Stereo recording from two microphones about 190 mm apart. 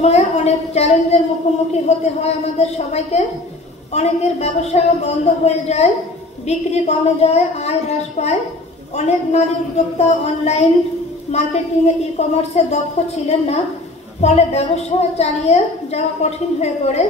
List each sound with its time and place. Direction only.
0.0 s a woman's voice: 35° left (ahead or behind)